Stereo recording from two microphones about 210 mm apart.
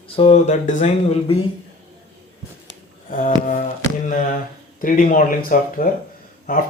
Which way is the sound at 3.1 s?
40° left (ahead or behind).